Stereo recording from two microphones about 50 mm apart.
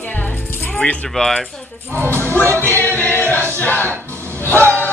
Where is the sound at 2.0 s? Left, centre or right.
Right.